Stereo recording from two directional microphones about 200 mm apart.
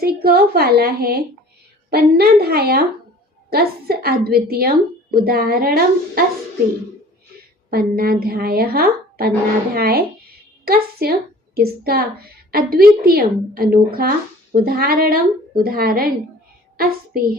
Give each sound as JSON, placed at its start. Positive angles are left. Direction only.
{"t": 0.0, "sound": "a woman's voice", "side_deg": -50}
{"t": 7.7, "sound": "a woman's voice", "side_deg": -50}
{"t": 11.0, "sound": "a woman's voice", "side_deg": -50}